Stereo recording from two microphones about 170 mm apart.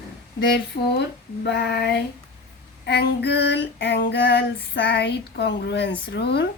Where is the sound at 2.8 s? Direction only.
85° left.